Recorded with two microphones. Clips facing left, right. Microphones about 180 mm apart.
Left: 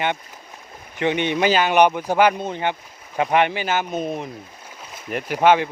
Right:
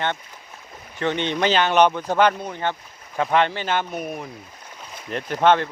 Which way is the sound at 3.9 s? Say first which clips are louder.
Left 4 dB; 20° left (ahead or behind).